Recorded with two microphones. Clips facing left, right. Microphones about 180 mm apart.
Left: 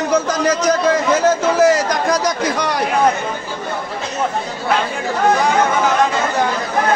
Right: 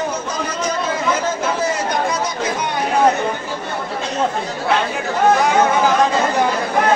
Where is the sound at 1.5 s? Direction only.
90° left.